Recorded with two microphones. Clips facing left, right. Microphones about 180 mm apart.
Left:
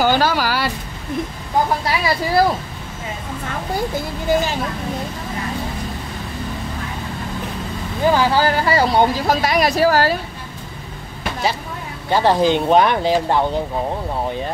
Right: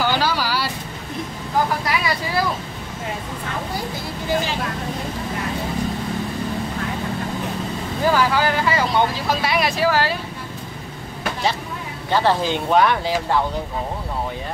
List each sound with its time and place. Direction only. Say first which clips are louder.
0.0 s vehicle: left 4 dB; 50° left (ahead or behind)
1.9 s speech: left 3 dB; 35° left (ahead or behind)
8.0 s speech: left 3 dB; 25° left (ahead or behind); by 10.1 s 40° left (ahead or behind)
12.1 s speech: left 4 dB; 15° left (ahead or behind)